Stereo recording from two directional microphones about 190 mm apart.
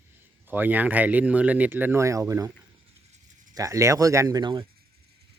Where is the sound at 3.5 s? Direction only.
15° right (ahead or behind).